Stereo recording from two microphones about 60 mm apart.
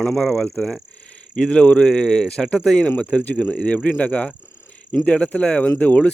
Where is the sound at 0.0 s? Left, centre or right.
Centre.